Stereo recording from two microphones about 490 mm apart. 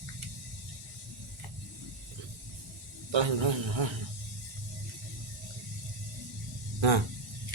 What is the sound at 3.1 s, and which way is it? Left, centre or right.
Speech, right.